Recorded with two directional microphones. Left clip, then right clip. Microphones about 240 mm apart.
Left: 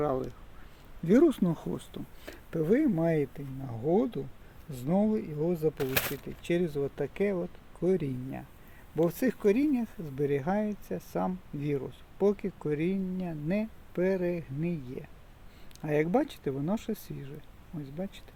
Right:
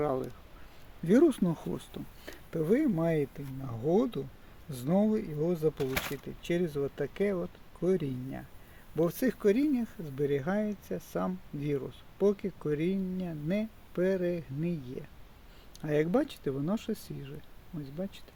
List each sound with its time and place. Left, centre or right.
0.0 s speech: centre
5.8 s speech: left
6.4 s speech: centre